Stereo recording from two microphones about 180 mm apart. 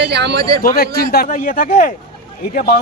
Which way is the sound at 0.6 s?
55° left (ahead or behind).